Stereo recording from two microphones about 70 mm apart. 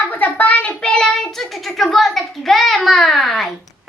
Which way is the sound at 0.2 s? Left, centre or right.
Left.